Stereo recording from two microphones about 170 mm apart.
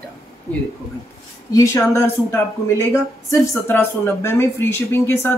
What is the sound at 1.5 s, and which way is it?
A woman's voice, 20° left (ahead or behind).